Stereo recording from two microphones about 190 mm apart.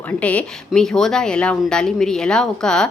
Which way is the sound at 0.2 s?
5° left (ahead or behind).